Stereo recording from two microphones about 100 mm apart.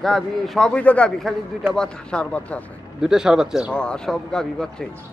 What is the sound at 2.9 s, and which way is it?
Speech, 5° right (ahead or behind).